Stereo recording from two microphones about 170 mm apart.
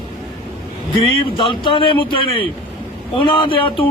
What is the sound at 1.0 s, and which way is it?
A man's voice, 30° left (ahead or behind).